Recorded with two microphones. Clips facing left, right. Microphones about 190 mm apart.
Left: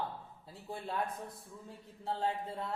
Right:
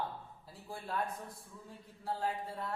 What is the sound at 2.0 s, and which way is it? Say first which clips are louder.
Speech: left 2 dB; 25° left (ahead or behind).